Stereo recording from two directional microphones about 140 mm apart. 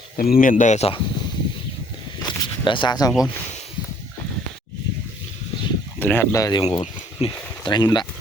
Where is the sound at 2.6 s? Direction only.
35° left (ahead or behind).